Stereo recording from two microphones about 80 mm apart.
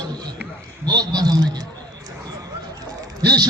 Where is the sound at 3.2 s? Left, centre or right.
Right.